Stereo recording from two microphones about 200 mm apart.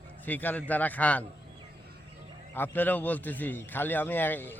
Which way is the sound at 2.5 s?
10° left (ahead or behind).